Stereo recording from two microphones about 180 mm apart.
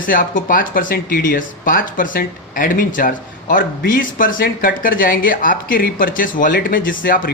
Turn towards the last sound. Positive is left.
turn(degrees=50)  # may be behind; listen again after turning